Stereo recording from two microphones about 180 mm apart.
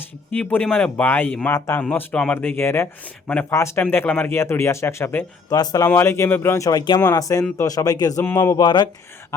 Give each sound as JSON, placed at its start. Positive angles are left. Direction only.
{"t": 0.3, "sound": "a man's voice", "side_deg": 10}
{"t": 8.6, "sound": "a man's voice", "side_deg": 25}